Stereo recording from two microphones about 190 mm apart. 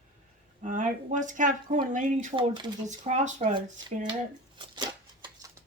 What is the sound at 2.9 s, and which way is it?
Speech, 40° right (ahead or behind).